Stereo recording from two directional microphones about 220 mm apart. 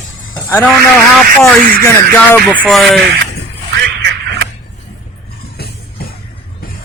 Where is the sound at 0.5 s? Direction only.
5° left (ahead or behind).